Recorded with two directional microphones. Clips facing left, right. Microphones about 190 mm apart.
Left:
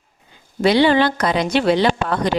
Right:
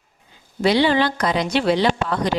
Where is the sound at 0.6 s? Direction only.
60° left (ahead or behind).